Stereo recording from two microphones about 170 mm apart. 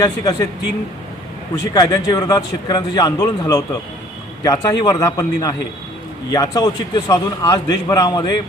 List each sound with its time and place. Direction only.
0.0 s speech: 20° left (ahead or behind)
1.5 s speech: 20° left (ahead or behind)